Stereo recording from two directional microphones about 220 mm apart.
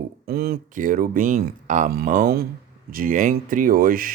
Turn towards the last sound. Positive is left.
turn(degrees=-40)  # may be behind; listen again after turning